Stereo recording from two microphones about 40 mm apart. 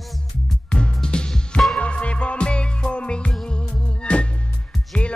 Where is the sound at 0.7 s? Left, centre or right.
Left.